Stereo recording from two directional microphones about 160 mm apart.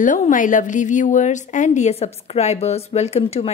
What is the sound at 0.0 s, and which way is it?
A woman's voice, 55° left (ahead or behind).